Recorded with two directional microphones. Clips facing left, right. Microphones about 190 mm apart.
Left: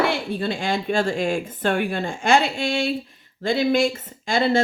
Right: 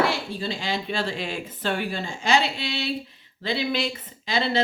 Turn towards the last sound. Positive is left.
turn(degrees=45)  # may be behind; listen again after turning